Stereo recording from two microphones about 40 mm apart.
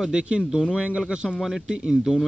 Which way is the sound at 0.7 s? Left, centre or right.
Right.